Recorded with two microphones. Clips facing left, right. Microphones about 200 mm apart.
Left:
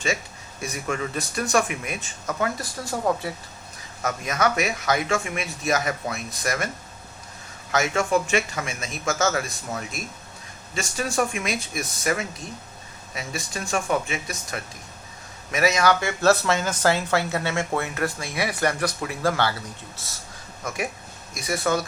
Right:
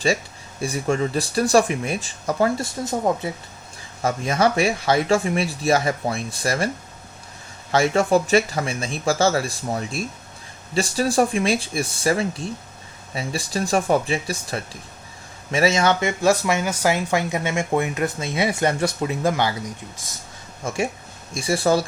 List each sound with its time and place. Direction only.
0.6 s speech: 30° right (ahead or behind)
7.7 s speech: 30° right (ahead or behind)
20.7 s speech: 25° right (ahead or behind)